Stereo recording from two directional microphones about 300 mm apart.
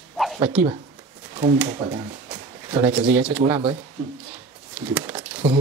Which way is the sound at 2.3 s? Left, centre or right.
Centre.